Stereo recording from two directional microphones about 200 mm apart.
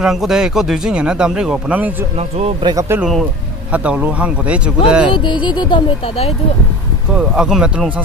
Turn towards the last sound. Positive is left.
turn(degrees=-5)  # may be behind; listen again after turning